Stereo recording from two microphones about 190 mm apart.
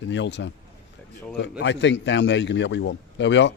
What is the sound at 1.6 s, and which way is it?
Speech, 70° left (ahead or behind).